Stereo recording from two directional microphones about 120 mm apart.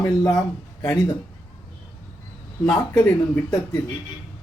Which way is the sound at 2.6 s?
20° left (ahead or behind).